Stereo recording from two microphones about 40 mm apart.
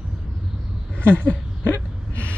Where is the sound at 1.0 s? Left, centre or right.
Left.